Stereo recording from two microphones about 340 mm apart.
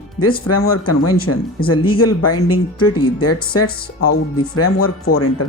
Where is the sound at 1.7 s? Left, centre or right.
Centre.